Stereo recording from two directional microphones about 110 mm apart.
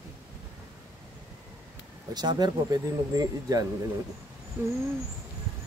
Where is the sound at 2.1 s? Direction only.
40° right (ahead or behind).